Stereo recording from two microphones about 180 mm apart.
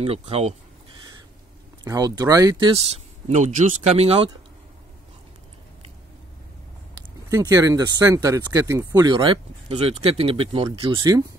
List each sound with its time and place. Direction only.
0.0 s speech: 35° right (ahead or behind)
1.9 s speech: 20° right (ahead or behind)
2.9 s speech: 40° right (ahead or behind)
7.0 s speech: 20° right (ahead or behind)